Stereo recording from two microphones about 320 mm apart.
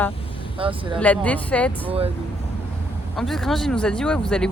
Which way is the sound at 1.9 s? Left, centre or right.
Centre.